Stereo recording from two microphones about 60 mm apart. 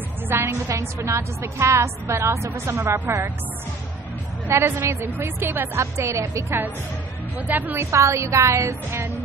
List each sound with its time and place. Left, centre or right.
0.3 s a woman's voice: right
4.5 s a woman's voice: right
5.8 s a woman's voice: right
7.3 s a woman's voice: right
7.7 s a woman's voice: right